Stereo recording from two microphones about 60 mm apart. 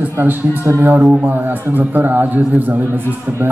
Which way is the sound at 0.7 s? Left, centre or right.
Right.